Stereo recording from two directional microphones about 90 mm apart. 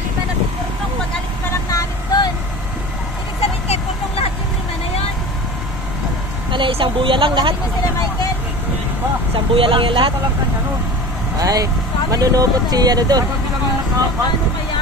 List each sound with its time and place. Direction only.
1.7 s vehicle: 35° left (ahead or behind)
6.5 s speech: 70° right (ahead or behind)
9.3 s speech: 80° right
11.3 s speech: 40° right (ahead or behind)